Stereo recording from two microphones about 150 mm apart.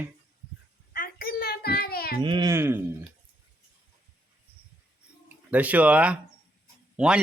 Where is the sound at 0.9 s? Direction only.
85° left.